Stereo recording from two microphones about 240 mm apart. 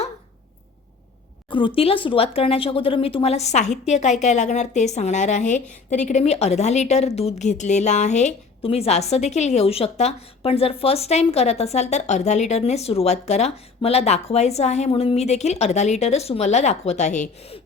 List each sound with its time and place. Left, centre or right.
1.5 s speech: left